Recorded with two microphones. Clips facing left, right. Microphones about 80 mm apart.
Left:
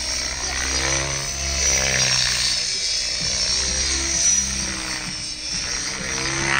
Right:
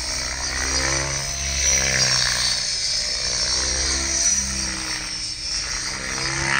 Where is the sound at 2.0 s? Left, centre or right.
Right.